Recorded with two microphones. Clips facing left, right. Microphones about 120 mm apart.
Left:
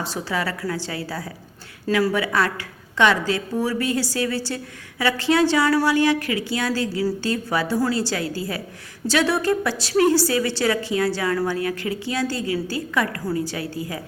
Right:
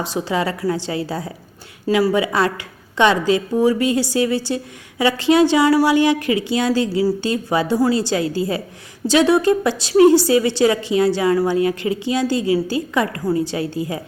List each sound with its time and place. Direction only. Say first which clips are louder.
0.0 s a woman's voice: right 5 dB; 20° right (ahead or behind)